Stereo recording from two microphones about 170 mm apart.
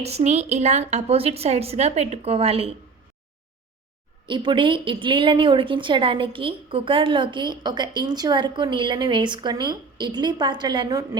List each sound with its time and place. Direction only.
0.0 s a woman's voice: 40° right (ahead or behind)
4.3 s a woman's voice: 30° right (ahead or behind)